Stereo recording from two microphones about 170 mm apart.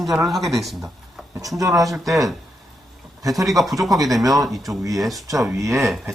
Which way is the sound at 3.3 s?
Centre (ahead or behind).